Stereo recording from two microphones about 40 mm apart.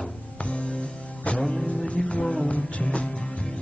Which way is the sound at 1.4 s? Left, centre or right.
Centre.